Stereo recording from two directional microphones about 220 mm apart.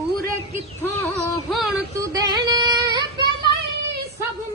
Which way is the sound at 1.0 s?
Centre (ahead or behind).